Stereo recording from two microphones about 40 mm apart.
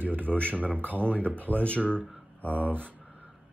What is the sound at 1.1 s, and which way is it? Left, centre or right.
Speech, left.